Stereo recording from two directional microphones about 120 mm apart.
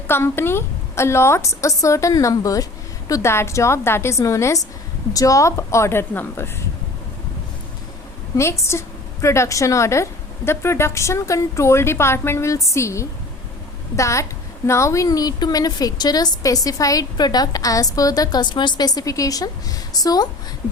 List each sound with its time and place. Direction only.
0.1 s a woman's voice: 20° left (ahead or behind)
8.4 s a woman's voice: 25° left (ahead or behind)